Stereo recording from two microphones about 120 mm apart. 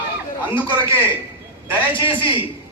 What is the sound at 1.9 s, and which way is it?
Speech, 45° left (ahead or behind).